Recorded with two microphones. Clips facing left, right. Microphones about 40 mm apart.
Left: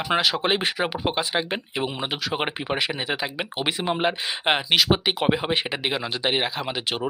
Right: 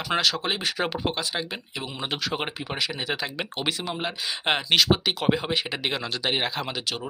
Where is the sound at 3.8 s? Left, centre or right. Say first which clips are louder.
Left 7 dB; left.